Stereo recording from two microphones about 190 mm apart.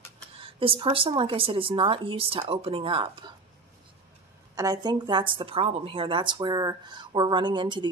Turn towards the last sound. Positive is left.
turn(degrees=-25)  # may be behind; listen again after turning